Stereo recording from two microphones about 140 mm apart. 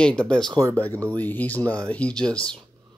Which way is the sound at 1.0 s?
10° left (ahead or behind).